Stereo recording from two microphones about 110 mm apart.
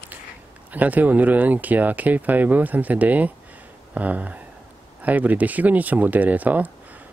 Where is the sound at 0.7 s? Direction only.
15° right (ahead or behind).